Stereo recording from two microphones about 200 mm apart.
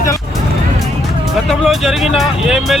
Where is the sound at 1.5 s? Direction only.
Centre (ahead or behind).